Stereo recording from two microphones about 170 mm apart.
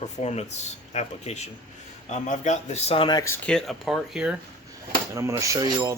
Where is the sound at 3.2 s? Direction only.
15° left (ahead or behind).